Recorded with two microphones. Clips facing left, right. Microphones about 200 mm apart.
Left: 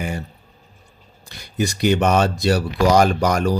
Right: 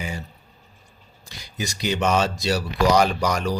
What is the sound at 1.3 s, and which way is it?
Speech, 60° left (ahead or behind).